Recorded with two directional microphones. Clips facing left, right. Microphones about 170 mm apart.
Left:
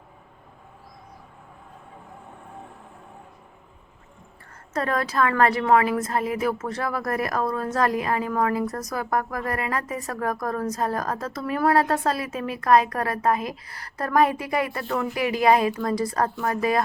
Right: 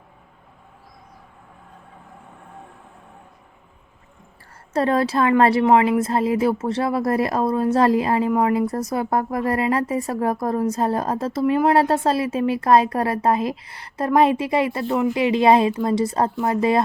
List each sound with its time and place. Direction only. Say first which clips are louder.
4.7 s speech: right 6 dB; 30° right (ahead or behind)